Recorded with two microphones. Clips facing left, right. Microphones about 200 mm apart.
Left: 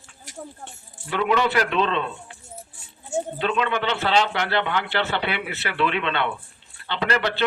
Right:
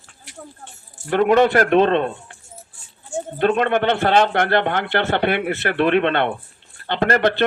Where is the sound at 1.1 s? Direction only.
50° right (ahead or behind).